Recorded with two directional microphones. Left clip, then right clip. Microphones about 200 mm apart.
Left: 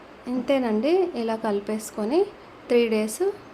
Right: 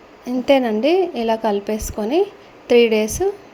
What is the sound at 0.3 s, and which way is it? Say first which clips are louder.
A woman's voice: right 8 dB; 20° right (ahead or behind).